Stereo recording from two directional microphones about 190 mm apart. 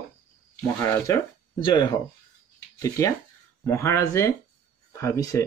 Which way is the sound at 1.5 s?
25° left (ahead or behind).